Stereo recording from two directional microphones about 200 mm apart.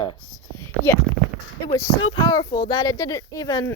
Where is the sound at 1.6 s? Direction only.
15° left (ahead or behind).